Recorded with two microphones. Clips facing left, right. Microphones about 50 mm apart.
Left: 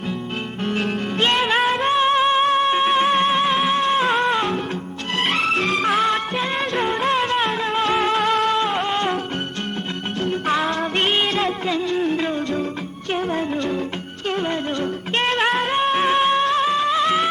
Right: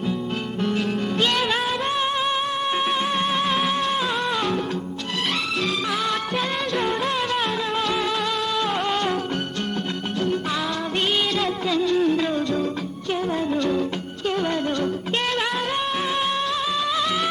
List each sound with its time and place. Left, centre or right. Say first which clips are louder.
0.6 s music: left 1 dB; left
2.6 s music: left 5 dB; centre
2.9 s music: left 6 dB; left
3.2 s music: left 4 dB; centre
3.9 s music: left 5 dB; left
5.2 s music: left 5 dB; left
6.6 s music: left 2 dB; left
7.9 s music: left 5 dB; left
8.5 s music: left 2 dB; left
10.2 s music: left 4 dB; left
13.1 s music: left 2 dB; left
13.5 s music: right 1 dB; left
16.4 s music: left 6 dB; left